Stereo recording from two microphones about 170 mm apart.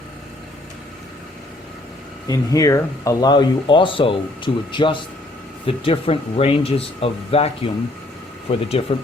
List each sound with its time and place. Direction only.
2.2 s speech: 20° left (ahead or behind); by 9.0 s 35° left (ahead or behind)